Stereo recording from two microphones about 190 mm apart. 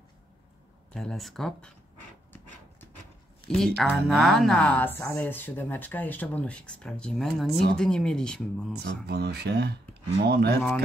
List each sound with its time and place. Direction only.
0.9 s speech: centre (ahead or behind)
3.4 s speech: centre (ahead or behind)
8.8 s speech: 55° right (ahead or behind)